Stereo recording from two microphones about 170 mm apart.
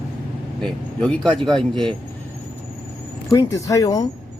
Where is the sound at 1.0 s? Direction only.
5° left (ahead or behind).